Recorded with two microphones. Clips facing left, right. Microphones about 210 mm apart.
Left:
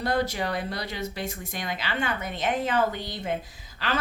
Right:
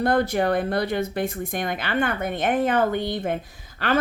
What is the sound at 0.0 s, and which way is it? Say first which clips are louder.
Speech: right 6 dB; 55° right (ahead or behind).